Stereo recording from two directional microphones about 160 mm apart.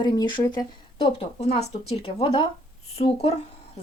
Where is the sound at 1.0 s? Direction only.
40° left (ahead or behind).